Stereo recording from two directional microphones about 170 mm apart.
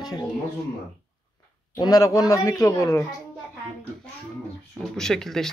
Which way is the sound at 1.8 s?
20° left (ahead or behind).